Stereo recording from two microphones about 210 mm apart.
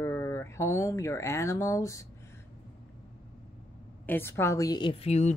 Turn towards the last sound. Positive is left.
turn(degrees=30)  # may be behind; listen again after turning